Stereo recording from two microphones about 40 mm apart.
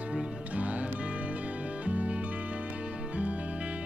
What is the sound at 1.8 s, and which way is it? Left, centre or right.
Music, right.